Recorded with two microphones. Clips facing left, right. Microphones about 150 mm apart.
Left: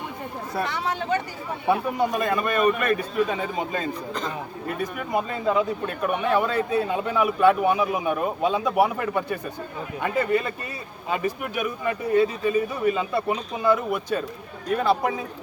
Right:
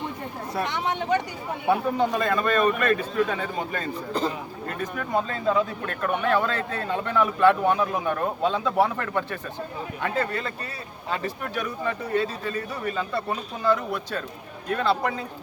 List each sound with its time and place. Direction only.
0.5 s speech: centre (ahead or behind)
2.0 s speech: 15° left (ahead or behind)